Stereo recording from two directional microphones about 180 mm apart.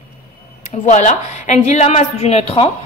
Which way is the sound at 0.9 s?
40° left (ahead or behind).